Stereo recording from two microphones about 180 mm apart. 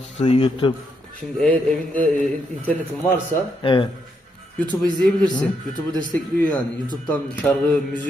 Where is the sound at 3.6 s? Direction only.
30° left (ahead or behind).